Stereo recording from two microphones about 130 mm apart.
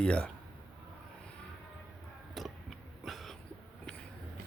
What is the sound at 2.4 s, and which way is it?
Tick-tock, centre (ahead or behind).